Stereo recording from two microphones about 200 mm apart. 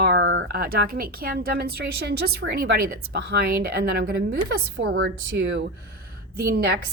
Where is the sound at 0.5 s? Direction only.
50° right (ahead or behind).